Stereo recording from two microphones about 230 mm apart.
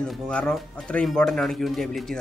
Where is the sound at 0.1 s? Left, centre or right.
Centre.